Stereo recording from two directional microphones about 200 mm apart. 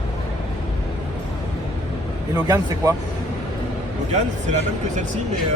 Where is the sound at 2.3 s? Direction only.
20° right (ahead or behind).